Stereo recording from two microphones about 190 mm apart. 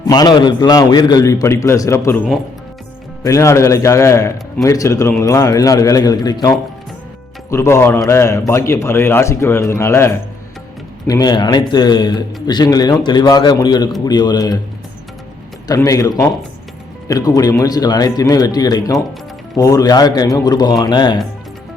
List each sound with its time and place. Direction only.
0.1 s a man's voice: 20° left (ahead or behind)
3.2 s a man's voice: 15° left (ahead or behind)
7.5 s a man's voice: 15° left (ahead or behind)
15.6 s a man's voice: 20° left (ahead or behind)